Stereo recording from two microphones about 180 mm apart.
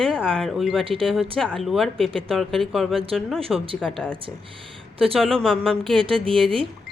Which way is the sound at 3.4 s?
30° right (ahead or behind).